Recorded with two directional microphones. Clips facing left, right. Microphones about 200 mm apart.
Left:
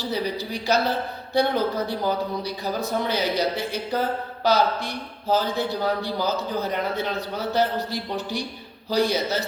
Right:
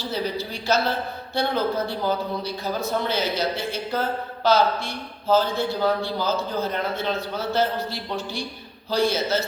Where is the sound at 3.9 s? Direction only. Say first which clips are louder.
Left 2 dB; 15° left (ahead or behind).